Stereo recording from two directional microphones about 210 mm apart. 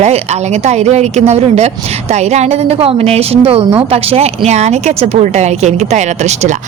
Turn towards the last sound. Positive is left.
turn(degrees=-35)  # may be behind; listen again after turning